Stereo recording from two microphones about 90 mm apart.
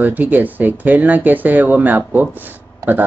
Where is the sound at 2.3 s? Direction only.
20° right (ahead or behind).